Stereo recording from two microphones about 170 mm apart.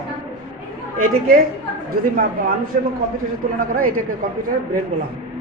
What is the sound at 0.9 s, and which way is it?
Speech, 55° right (ahead or behind).